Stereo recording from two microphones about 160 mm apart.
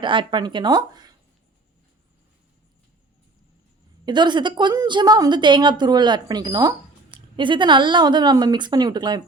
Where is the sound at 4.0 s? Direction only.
25° right (ahead or behind).